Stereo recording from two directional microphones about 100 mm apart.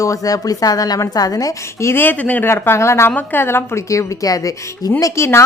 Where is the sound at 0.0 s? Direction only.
35° left (ahead or behind).